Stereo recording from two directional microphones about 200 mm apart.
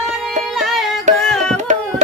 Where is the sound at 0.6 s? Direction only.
Centre (ahead or behind).